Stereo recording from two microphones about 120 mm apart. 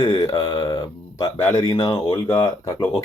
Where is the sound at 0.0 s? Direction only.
40° left (ahead or behind).